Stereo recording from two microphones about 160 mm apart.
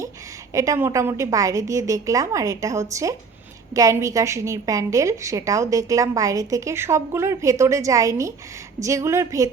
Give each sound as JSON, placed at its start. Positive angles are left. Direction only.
{"t": 0.5, "sound": "a woman's voice", "side_deg": -20}